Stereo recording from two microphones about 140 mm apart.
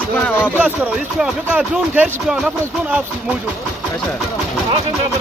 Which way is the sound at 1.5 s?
10° right (ahead or behind).